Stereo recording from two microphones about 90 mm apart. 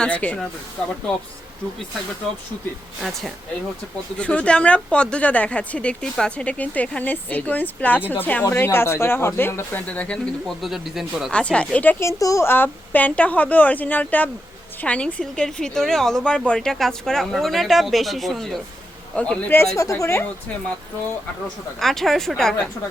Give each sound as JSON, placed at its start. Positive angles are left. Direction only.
{"t": 0.0, "sound": "speech", "side_deg": 15}
{"t": 3.0, "sound": "a woman's voice", "side_deg": 0}
{"t": 4.2, "sound": "speech", "side_deg": 15}
{"t": 9.8, "sound": "speech", "side_deg": 15}
{"t": 10.4, "sound": "a woman's voice", "side_deg": -5}
{"t": 11.3, "sound": "speech", "side_deg": 10}
{"t": 12.0, "sound": "speech", "side_deg": 35}
{"t": 12.5, "sound": "a woman's voice", "side_deg": 25}
{"t": 19.1, "sound": "speech", "side_deg": 15}
{"t": 19.7, "sound": "speech", "side_deg": 35}
{"t": 21.8, "sound": "a woman's voice", "side_deg": 5}